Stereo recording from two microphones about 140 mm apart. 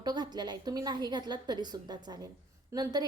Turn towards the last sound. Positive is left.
turn(degrees=-30)  # may be behind; listen again after turning